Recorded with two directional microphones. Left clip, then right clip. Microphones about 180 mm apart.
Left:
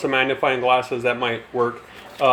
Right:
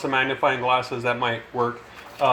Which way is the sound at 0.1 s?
40° left (ahead or behind).